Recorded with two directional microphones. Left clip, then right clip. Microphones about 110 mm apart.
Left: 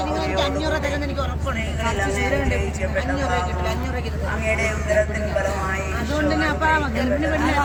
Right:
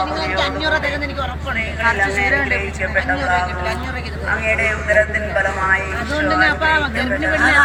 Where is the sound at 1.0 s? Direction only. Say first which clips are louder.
Right 3 dB; 30° left (ahead or behind).